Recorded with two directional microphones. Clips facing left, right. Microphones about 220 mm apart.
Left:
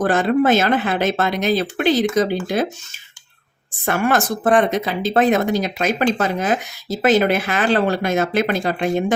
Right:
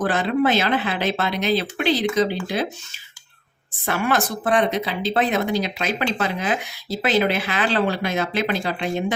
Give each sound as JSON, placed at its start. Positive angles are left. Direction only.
{"t": 0.0, "sound": "speech", "side_deg": 45}
{"t": 3.8, "sound": "speech", "side_deg": 50}